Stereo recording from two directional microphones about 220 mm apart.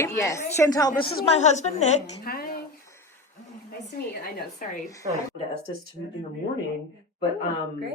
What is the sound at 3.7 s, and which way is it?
A woman's voice, 45° left (ahead or behind).